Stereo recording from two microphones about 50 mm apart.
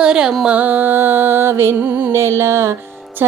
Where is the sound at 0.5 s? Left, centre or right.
Right.